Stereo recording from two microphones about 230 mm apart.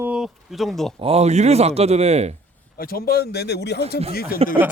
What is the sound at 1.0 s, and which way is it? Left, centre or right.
A man's voice, right.